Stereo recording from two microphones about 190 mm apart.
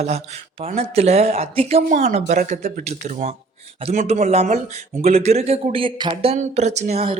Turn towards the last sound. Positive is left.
turn(degrees=-30)  # may be behind; listen again after turning